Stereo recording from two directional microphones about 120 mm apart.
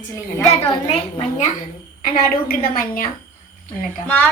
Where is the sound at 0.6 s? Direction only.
40° left (ahead or behind).